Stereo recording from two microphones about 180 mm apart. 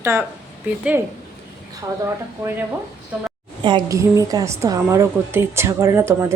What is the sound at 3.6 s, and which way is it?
A woman's voice, 20° right (ahead or behind).